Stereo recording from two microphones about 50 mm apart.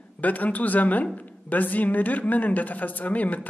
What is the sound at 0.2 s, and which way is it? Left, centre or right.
Speech, left.